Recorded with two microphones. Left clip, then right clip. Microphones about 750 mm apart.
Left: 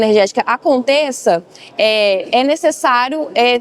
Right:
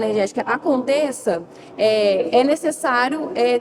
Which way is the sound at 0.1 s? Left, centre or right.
Left.